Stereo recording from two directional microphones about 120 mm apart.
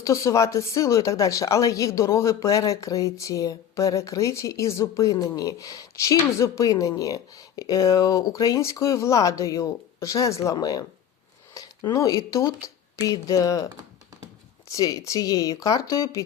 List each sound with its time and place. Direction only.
0.0 s speech: 25° left (ahead or behind)
14.7 s speech: 30° left (ahead or behind)